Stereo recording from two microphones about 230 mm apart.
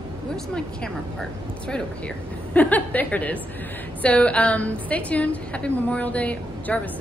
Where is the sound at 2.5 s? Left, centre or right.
Centre.